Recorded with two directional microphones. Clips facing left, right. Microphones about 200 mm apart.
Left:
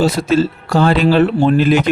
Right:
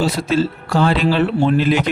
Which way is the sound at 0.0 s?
45° left (ahead or behind).